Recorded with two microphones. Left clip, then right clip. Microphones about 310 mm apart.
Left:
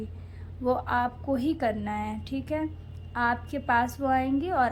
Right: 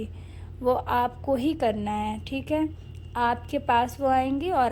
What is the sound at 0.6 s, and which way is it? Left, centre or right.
A woman's voice, right.